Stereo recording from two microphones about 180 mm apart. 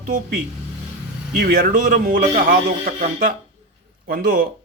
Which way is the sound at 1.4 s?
50° right (ahead or behind).